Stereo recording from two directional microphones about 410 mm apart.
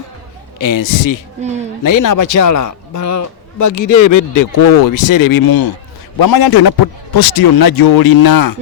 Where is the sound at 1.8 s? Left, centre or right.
Left.